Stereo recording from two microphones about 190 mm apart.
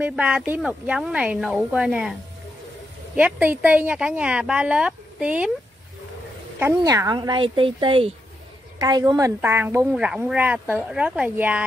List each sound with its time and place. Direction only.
0.0 s speech: 5° right (ahead or behind)
3.2 s speech: 5° right (ahead or behind)
6.6 s a woman's voice: 15° right (ahead or behind)